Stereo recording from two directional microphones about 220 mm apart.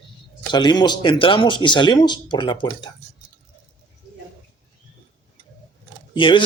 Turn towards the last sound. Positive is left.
turn(degrees=20)  # may be behind; listen again after turning